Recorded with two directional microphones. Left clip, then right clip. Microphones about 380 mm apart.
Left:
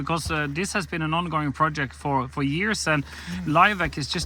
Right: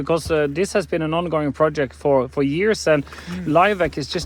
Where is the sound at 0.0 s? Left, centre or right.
Centre.